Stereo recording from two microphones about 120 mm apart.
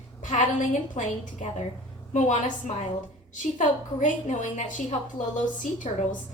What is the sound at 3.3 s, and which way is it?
A woman's voice, 90° left.